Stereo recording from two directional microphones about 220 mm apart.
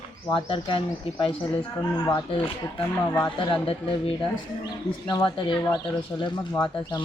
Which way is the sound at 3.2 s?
20° left (ahead or behind).